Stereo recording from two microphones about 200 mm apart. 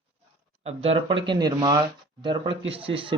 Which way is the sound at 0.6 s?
30° right (ahead or behind).